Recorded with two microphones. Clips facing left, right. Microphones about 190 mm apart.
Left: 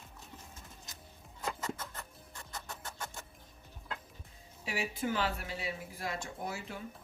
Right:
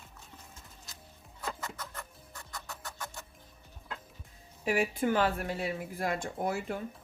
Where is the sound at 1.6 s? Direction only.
20° left (ahead or behind).